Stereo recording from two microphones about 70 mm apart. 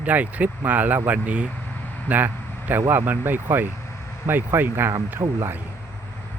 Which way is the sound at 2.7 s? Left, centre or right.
Right.